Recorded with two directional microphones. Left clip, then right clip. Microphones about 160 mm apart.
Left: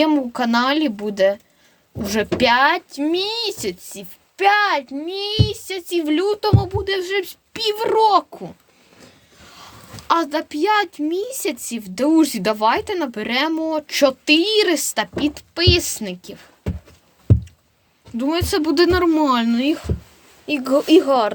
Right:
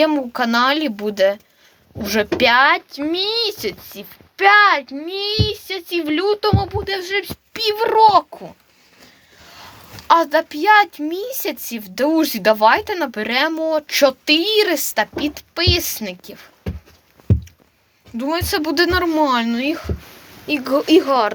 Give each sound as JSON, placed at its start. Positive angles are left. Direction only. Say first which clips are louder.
{"t": 0.0, "sound": "a woman's voice", "louder": "right 1 dB", "side_deg": 15}
{"t": 10.1, "sound": "a woman's voice", "louder": "right 5 dB", "side_deg": 15}
{"t": 18.2, "sound": "a woman's voice", "louder": "even", "side_deg": 30}